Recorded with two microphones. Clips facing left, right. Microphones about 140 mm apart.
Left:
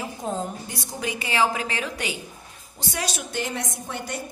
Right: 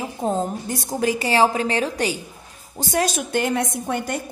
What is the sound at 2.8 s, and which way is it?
A woman's voice, 45° right (ahead or behind).